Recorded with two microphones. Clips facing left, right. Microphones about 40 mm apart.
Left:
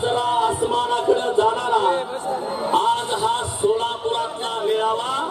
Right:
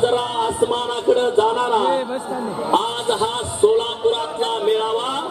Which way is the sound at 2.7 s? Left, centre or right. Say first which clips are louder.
Even; right.